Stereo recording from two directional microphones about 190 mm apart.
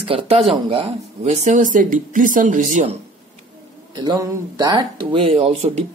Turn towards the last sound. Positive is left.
turn(degrees=-30)  # may be behind; listen again after turning